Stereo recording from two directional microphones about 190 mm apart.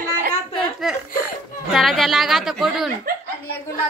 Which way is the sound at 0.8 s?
Centre (ahead or behind).